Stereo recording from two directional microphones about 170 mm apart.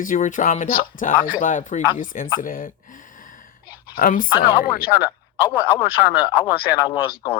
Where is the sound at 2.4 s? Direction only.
55° left (ahead or behind).